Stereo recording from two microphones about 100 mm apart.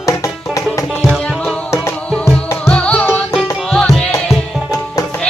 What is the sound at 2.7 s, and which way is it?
Music, 10° left (ahead or behind).